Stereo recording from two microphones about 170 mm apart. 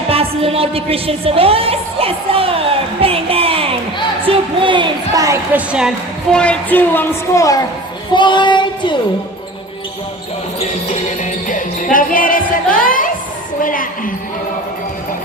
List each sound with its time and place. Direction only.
0.1 s a sound: 35° right (ahead or behind)
5.5 s speech: 5° right (ahead or behind)
6.3 s speech: 5° left (ahead or behind)
8.1 s female singing: 25° left (ahead or behind)
11.4 s a woman's voice: 50° left (ahead or behind)